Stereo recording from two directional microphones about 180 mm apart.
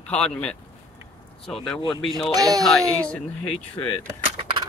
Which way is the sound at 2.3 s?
20° right (ahead or behind).